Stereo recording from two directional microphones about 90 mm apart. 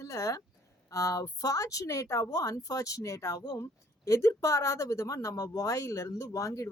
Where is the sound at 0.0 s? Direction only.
35° left (ahead or behind).